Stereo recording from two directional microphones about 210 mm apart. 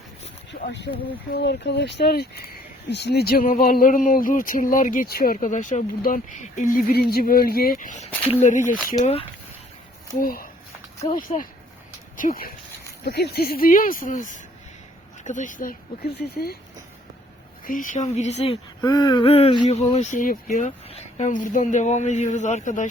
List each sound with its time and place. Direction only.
0.5 s a sound: 45° left (ahead or behind)
1.3 s speech: 55° left (ahead or behind); by 8.7 s 35° left (ahead or behind)
10.2 s speech: 45° left (ahead or behind)
17.7 s speech: 40° left (ahead or behind)